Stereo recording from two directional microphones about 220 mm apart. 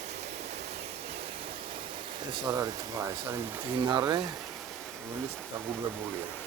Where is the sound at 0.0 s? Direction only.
30° right (ahead or behind); by 3.8 s 10° right (ahead or behind).